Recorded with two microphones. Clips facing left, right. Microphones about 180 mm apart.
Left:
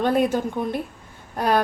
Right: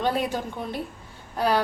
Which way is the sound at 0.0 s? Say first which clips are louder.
Left 5 dB; 55° left (ahead or behind).